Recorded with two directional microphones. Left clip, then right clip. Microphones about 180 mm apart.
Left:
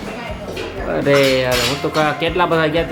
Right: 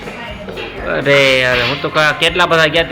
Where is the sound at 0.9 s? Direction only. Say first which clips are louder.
Right 3 dB; 10° left (ahead or behind).